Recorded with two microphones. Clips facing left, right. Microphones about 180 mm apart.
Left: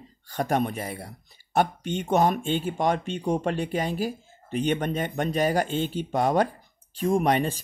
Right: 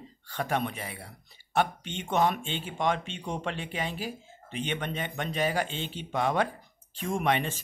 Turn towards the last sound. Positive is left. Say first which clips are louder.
# left 6 dB
turn(degrees=40)  # may be behind; listen again after turning